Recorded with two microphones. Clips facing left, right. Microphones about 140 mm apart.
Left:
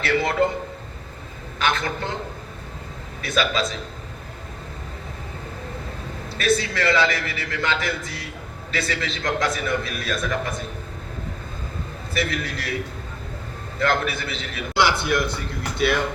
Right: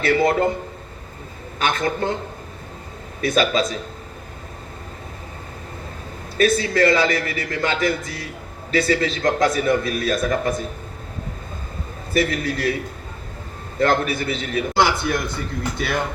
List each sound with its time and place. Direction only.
0.0 s a man's voice: 45° right (ahead or behind)
1.5 s a man's voice: 45° right (ahead or behind)
3.2 s a man's voice: 45° right (ahead or behind)
6.3 s a man's voice: 45° right (ahead or behind)
12.1 s a man's voice: 40° right (ahead or behind)
13.7 s a man's voice: 40° right (ahead or behind)